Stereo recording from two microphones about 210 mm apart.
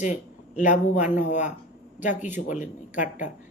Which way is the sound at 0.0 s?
35° left (ahead or behind).